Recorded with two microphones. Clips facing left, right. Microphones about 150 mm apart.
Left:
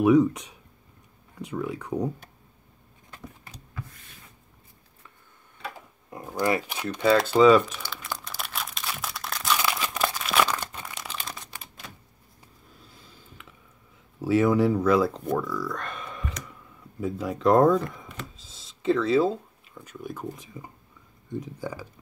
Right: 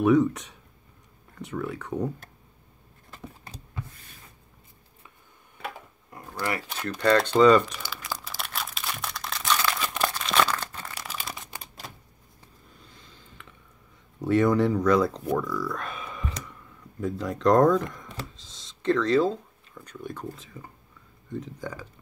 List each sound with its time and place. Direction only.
0.0 s speech: 10° left (ahead or behind)
3.4 s power windows: 30° right (ahead or behind)
6.0 s speech: 20° left (ahead or behind); by 7.8 s 5° left (ahead or behind)
7.8 s a sound: 5° right (ahead or behind)
9.6 s crumpling: 10° left (ahead or behind)
11.0 s crumpling: 5° right (ahead or behind)
11.5 s typewriter: 40° right (ahead or behind)
12.7 s a sound: 5° left (ahead or behind)
14.2 s speech: 5° left (ahead or behind)
18.3 s a sound: 5° left (ahead or behind)
20.2 s speech: 15° left (ahead or behind)